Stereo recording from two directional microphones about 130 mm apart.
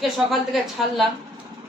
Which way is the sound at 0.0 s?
Centre (ahead or behind).